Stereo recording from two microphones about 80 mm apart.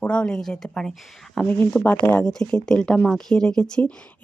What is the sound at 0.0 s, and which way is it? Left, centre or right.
A woman's voice, centre.